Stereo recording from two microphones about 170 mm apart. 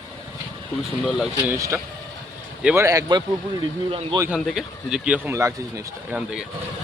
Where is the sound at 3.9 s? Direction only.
30° right (ahead or behind).